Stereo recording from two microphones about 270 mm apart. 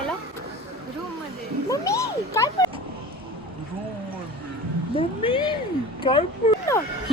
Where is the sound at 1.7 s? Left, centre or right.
Centre.